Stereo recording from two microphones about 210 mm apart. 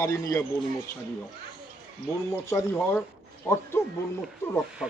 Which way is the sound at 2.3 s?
15° left (ahead or behind).